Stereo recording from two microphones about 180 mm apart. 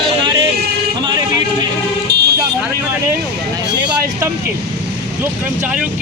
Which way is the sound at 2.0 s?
65° right (ahead or behind).